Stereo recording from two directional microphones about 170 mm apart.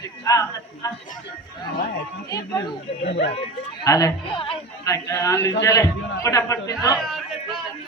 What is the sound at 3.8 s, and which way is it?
Speech, 20° left (ahead or behind).